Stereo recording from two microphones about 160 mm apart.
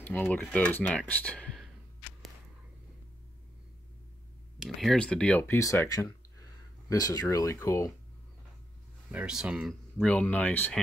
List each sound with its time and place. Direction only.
0.0 s speech: 10° left (ahead or behind)
4.6 s speech: centre (ahead or behind); by 7.9 s 20° left (ahead or behind)
9.1 s speech: 5° right (ahead or behind)
10.0 s speech: 10° left (ahead or behind)